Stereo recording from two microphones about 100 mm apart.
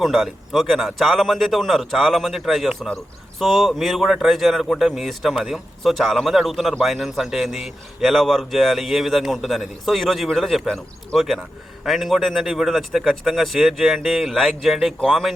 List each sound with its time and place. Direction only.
0.0 s speech: centre (ahead or behind)